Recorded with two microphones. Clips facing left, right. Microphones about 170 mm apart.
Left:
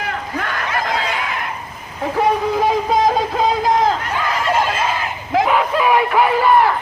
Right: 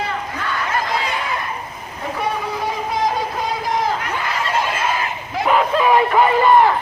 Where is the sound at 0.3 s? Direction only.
70° left (ahead or behind).